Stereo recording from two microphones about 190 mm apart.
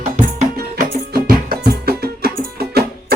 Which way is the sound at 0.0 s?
35° right (ahead or behind).